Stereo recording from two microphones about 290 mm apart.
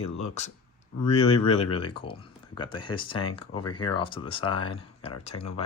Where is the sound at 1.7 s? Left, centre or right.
Centre.